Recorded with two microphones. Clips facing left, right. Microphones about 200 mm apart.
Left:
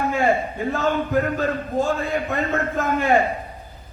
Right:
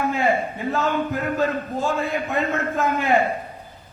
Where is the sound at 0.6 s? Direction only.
45° left (ahead or behind).